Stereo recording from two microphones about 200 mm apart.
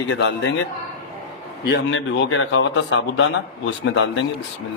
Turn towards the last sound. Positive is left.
turn(degrees=70)  # may be behind; listen again after turning